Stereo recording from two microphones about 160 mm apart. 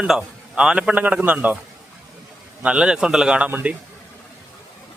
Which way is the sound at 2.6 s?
5° right (ahead or behind).